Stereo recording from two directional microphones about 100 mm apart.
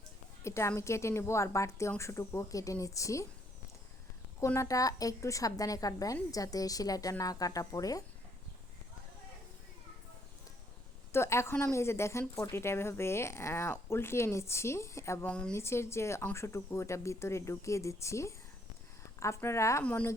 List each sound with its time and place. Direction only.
0.4 s a woman's voice: 30° left (ahead or behind)
4.4 s a woman's voice: 30° left (ahead or behind)
11.1 s speech: 25° left (ahead or behind)
15.3 s a woman's voice: 10° left (ahead or behind)
15.5 s speech: 25° left (ahead or behind)
19.8 s a woman's voice: 15° left (ahead or behind)